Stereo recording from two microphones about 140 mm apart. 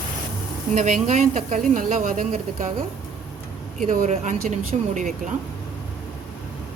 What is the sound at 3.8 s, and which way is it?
Speech, 60° right (ahead or behind).